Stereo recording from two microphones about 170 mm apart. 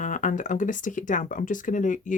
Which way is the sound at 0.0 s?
50° left (ahead or behind).